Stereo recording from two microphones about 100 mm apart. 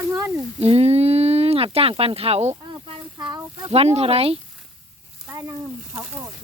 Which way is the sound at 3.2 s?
50° right (ahead or behind).